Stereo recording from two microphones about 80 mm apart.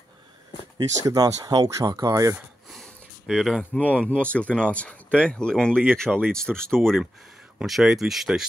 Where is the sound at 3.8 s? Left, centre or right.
Centre.